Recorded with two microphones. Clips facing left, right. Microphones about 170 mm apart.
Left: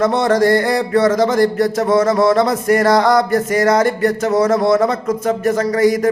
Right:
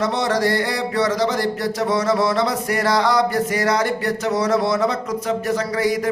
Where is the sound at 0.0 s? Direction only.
50° left (ahead or behind).